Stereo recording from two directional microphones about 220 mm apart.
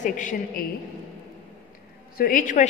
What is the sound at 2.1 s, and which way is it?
Speech, 40° left (ahead or behind).